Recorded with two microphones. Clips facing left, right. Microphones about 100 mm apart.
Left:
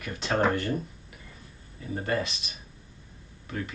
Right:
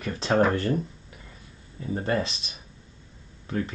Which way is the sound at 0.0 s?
30° right (ahead or behind).